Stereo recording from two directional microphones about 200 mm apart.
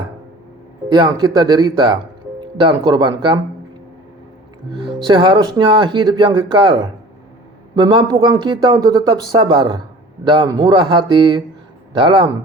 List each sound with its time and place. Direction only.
0.9 s speech: 20° right (ahead or behind)
4.7 s speech: 25° right (ahead or behind)